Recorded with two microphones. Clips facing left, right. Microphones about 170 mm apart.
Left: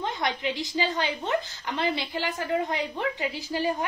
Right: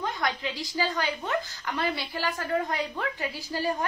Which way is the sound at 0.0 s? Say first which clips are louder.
Left 1 dB; 20° left (ahead or behind).